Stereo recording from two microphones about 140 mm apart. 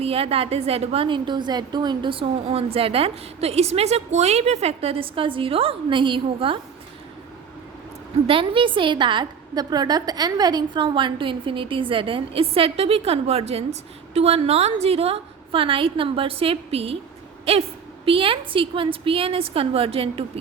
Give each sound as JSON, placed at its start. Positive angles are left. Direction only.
{"t": 0.0, "sound": "a woman's voice", "side_deg": -45}
{"t": 8.3, "sound": "a woman's voice", "side_deg": -40}